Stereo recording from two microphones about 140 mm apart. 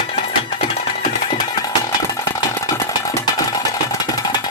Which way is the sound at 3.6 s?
30° left (ahead or behind).